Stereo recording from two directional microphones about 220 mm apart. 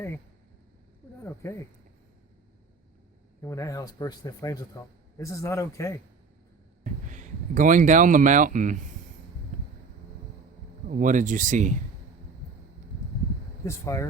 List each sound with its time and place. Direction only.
1.2 s speech: 15° left (ahead or behind)
3.4 s speech: 15° left (ahead or behind)
6.8 s speech: 35° right (ahead or behind)
10.8 s speech: 35° right (ahead or behind)
13.7 s speech: 15° left (ahead or behind)